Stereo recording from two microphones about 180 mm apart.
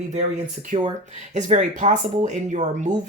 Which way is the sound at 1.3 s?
40° right (ahead or behind).